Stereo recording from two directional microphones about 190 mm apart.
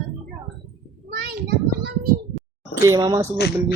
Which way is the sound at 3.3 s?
60° left (ahead or behind).